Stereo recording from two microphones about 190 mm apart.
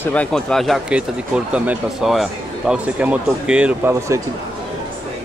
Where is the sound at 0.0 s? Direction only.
5° left (ahead or behind); by 4.2 s 10° right (ahead or behind).